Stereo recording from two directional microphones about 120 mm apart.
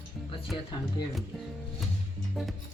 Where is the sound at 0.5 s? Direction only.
40° left (ahead or behind).